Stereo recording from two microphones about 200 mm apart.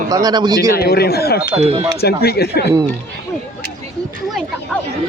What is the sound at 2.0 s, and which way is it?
Speech, 50° left (ahead or behind).